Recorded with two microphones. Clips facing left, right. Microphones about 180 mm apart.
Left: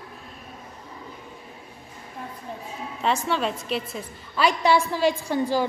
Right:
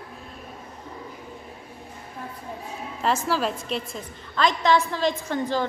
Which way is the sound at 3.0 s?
Centre (ahead or behind).